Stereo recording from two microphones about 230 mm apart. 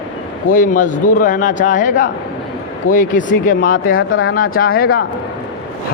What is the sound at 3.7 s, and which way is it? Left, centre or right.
Speech, left.